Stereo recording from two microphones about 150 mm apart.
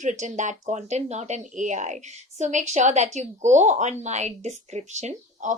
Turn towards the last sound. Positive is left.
turn(degrees=-50)  # may be behind; listen again after turning